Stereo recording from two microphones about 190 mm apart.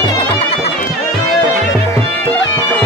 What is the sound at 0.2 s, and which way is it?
Music, 30° left (ahead or behind).